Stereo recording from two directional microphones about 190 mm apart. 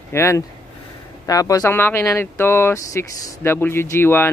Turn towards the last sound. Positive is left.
turn(degrees=10)  # may be behind; listen again after turning